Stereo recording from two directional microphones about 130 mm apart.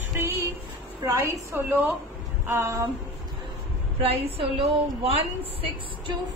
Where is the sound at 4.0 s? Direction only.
50° right (ahead or behind).